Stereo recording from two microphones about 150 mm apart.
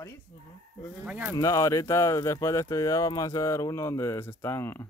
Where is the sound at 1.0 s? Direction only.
10° right (ahead or behind).